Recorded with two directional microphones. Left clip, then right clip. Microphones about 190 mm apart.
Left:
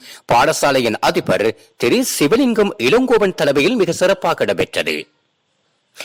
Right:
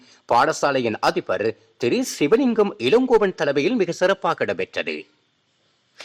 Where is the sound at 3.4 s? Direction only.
30° left (ahead or behind).